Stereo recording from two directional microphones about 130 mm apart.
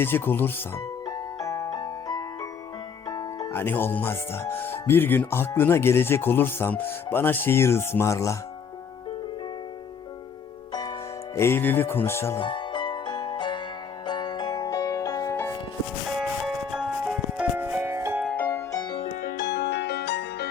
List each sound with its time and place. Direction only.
0.0 s speech: 15° left (ahead or behind)
1.0 s music: 30° left (ahead or behind)
3.5 s speech: 15° left (ahead or behind)
10.7 s music: 35° left (ahead or behind)
11.3 s speech: 20° left (ahead or behind)
12.4 s music: 40° left (ahead or behind)
16.1 s music: 5° right (ahead or behind)
18.3 s music: 15° left (ahead or behind)
18.8 s music: 35° left (ahead or behind)